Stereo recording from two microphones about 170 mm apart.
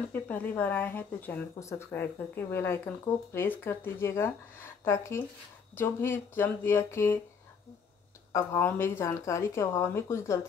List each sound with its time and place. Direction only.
0.1 s speech: 10° left (ahead or behind)
8.3 s speech: 15° left (ahead or behind)